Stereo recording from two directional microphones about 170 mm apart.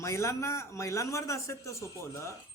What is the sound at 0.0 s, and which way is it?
Speech, 15° left (ahead or behind).